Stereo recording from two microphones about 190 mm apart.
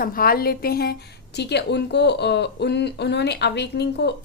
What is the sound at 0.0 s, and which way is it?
A woman's voice, 50° left (ahead or behind).